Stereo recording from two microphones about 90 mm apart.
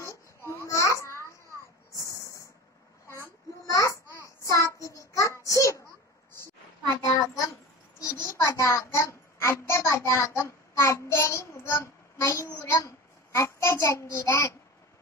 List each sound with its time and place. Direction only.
0.0 s babbling: 30° left (ahead or behind)
3.6 s babbling: 40° left (ahead or behind)
4.5 s child singing: 35° left (ahead or behind)
7.0 s a sound: 40° left (ahead or behind)